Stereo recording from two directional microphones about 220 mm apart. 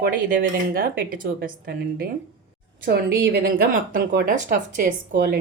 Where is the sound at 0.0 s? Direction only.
40° right (ahead or behind).